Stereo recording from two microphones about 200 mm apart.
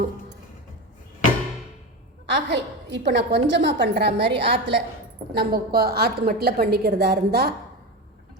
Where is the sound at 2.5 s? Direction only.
55° right (ahead or behind).